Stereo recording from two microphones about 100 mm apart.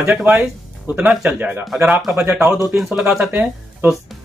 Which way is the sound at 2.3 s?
20° right (ahead or behind).